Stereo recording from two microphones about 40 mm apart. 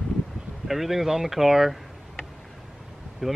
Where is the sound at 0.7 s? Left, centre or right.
Centre.